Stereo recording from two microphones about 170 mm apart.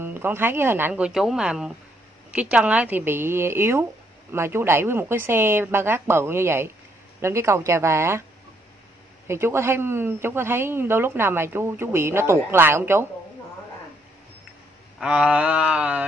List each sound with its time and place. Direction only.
0.0 s speech: 15° right (ahead or behind)
9.3 s speech: 15° right (ahead or behind)
15.0 s speech: 5° right (ahead or behind)